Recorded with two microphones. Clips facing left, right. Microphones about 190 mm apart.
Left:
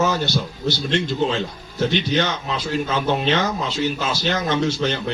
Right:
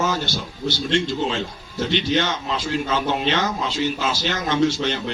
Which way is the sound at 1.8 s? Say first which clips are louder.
Left 1 dB; 45° left (ahead or behind).